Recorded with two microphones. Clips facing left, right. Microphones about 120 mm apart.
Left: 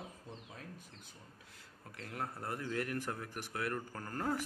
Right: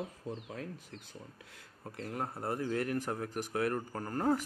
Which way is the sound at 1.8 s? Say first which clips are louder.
Right 4 dB; 30° right (ahead or behind).